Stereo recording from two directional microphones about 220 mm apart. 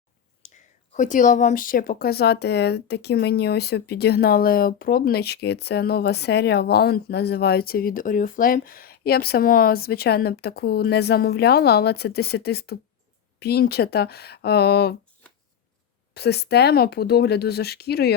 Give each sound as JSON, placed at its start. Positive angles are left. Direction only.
{"t": 0.4, "sound": "speech", "side_deg": 35}
{"t": 16.1, "sound": "speech", "side_deg": 50}